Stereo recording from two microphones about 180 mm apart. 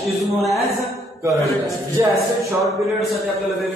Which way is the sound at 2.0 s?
15° right (ahead or behind).